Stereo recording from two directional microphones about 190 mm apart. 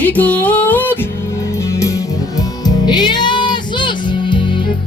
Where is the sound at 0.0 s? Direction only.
10° left (ahead or behind).